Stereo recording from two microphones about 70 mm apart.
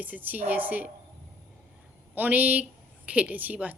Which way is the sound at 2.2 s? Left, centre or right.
Right.